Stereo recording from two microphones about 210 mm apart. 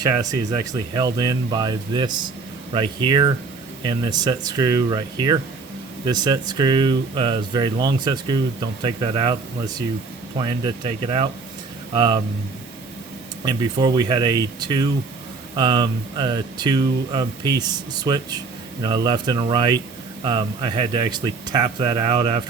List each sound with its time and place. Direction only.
0.0 s speech: 20° right (ahead or behind)
13.4 s speech: 20° right (ahead or behind)